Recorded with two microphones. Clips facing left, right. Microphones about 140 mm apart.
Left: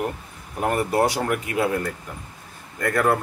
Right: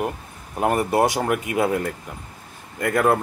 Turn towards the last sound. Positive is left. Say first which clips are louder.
# right 2 dB
turn(degrees=-20)  # may be behind; listen again after turning